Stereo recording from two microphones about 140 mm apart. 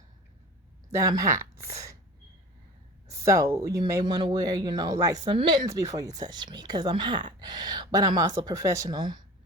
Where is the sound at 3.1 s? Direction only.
20° right (ahead or behind).